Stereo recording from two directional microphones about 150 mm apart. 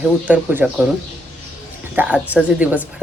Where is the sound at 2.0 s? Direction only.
10° right (ahead or behind).